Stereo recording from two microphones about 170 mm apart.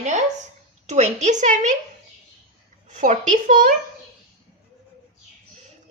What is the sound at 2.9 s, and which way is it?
Speech, 45° right (ahead or behind).